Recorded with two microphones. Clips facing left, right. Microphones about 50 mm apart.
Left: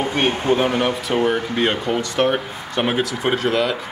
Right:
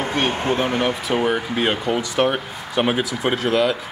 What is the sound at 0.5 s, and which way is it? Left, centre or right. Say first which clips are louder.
Speech: left 5 dB; left.